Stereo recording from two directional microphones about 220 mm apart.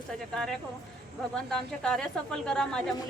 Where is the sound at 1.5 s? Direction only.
5° left (ahead or behind).